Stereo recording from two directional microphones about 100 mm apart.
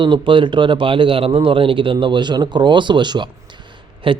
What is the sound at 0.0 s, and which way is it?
A man's voice, 55° right (ahead or behind).